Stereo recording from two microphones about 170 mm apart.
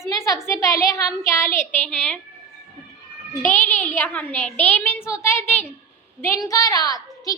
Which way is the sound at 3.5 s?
10° left (ahead or behind).